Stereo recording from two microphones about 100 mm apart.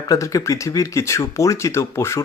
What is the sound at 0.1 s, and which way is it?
Speech, 35° left (ahead or behind).